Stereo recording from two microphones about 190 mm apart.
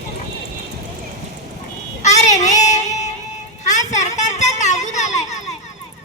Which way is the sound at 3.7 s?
40° left (ahead or behind).